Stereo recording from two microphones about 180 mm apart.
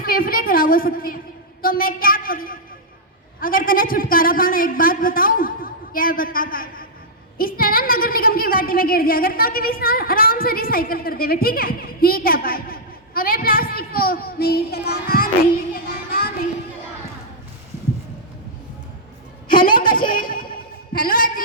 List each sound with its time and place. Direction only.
0.0 s a man's voice: 55° left (ahead or behind)
15.7 s child singing: 55° left (ahead or behind)
19.5 s a sound: 50° left (ahead or behind)